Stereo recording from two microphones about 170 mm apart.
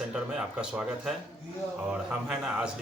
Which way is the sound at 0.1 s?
5° right (ahead or behind).